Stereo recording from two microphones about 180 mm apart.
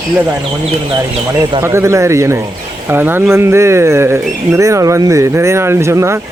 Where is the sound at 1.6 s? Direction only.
15° right (ahead or behind).